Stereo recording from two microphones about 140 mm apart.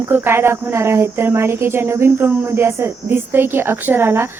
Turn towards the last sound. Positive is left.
turn(degrees=-15)  # may be behind; listen again after turning